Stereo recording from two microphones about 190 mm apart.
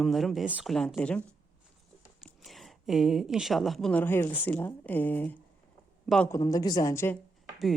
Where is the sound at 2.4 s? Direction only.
Centre (ahead or behind).